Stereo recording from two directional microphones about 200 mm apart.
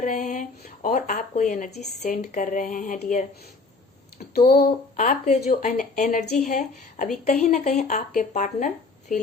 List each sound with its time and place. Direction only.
0.0 s speech: 40° left (ahead or behind)
4.4 s speech: 50° left (ahead or behind)